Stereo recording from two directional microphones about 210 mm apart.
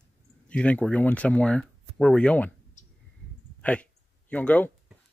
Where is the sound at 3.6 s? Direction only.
5° left (ahead or behind).